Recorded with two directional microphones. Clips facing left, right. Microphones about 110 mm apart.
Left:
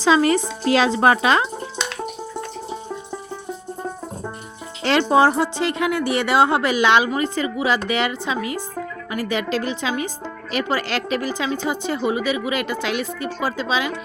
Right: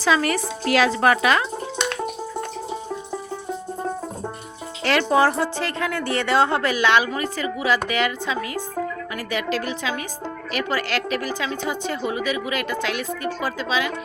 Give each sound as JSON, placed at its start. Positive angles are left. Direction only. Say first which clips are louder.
{"t": 0.0, "sound": "a woman's voice", "louder": "left 4 dB", "side_deg": 25}
{"t": 4.8, "sound": "a woman's voice", "louder": "left 2 dB", "side_deg": 25}